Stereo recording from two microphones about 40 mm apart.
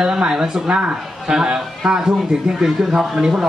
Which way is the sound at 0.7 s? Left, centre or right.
Right.